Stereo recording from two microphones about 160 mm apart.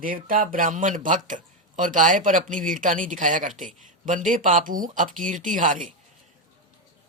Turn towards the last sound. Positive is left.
turn(degrees=-55)  # may be behind; listen again after turning